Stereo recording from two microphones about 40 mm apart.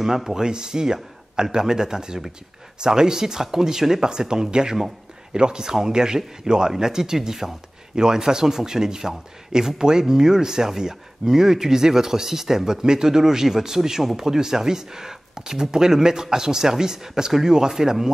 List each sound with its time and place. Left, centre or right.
0.0 s speech: centre